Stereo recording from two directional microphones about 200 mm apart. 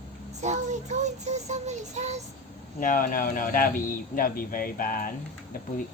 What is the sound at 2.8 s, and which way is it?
Speech, 45° left (ahead or behind).